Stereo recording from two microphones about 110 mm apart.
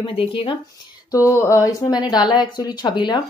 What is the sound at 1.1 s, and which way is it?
Speech, 25° left (ahead or behind).